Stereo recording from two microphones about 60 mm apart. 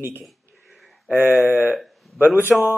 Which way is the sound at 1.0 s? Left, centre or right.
Right.